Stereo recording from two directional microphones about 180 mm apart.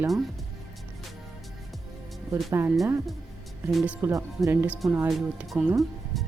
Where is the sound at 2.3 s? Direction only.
15° right (ahead or behind).